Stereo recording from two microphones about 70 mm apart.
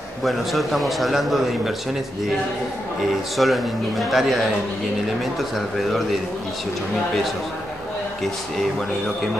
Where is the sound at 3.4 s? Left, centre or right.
Centre.